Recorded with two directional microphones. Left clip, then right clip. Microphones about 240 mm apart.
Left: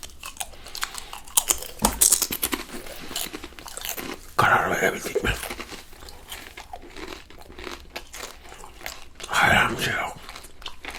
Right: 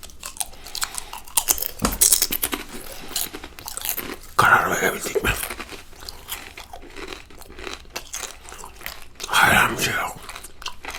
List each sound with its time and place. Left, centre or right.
0.2 s chewing: left
3.1 s biting: left; by 5.6 s centre
7.6 s a sound: centre
8.8 s biting: left